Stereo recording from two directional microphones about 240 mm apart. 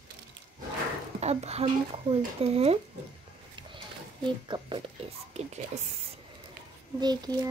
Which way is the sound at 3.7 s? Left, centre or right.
Centre.